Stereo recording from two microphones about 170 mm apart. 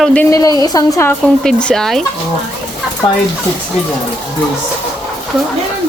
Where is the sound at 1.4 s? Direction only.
5° left (ahead or behind).